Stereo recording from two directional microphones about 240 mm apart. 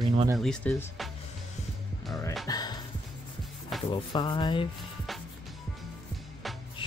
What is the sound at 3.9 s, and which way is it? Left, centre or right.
Speech, centre.